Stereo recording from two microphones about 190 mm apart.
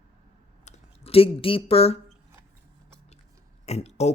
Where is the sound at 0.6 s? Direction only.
30° left (ahead or behind).